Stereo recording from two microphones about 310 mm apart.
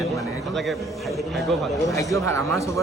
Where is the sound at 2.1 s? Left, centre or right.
Centre.